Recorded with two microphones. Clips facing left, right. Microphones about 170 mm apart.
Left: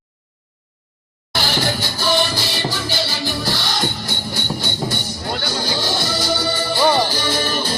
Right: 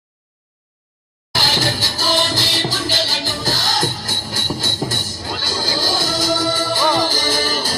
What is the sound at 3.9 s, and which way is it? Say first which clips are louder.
Music: left 1 dB; 90° right.